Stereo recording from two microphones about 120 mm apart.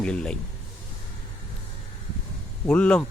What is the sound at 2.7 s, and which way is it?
Speech, 10° left (ahead or behind).